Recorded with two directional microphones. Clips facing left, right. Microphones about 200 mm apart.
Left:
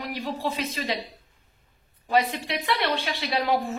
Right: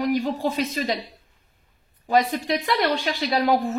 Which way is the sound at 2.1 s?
45° right (ahead or behind).